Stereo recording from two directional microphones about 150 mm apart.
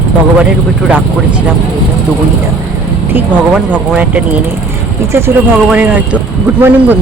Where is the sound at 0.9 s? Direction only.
10° right (ahead or behind).